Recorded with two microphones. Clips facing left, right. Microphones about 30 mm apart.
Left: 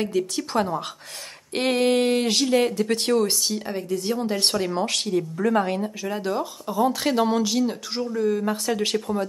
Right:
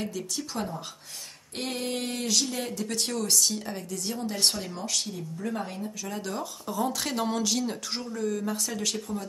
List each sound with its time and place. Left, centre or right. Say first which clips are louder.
0.0 s speech: left 9 dB; left
0.6 s speech: left 10 dB; left
5.5 s speech: left 12 dB; left
6.0 s speech: left 7 dB; left